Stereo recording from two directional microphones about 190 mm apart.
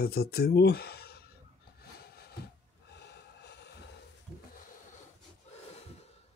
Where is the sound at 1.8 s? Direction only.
55° left (ahead or behind).